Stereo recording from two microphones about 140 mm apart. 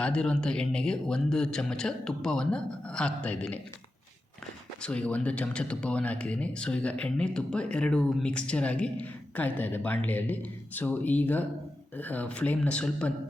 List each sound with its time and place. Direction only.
0.0 s speech: 5° left (ahead or behind)
4.8 s speech: 10° left (ahead or behind)